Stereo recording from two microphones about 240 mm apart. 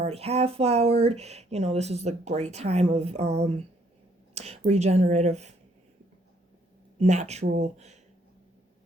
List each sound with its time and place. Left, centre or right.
0.0 s speech: right
7.0 s speech: right